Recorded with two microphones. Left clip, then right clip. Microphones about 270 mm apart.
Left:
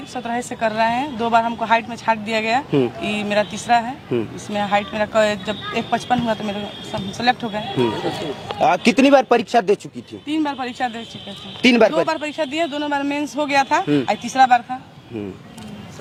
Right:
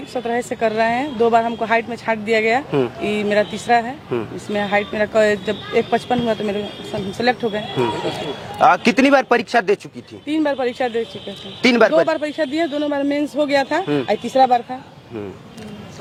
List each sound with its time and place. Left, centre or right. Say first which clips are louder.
0.1 s speech: right 4 dB; left
8.5 s speech: right 4 dB; right
8.8 s speech: left 1 dB; centre
10.2 s speech: right 4 dB; left
11.6 s speech: right 1 dB; centre
12.0 s a man's voice: right 2 dB; left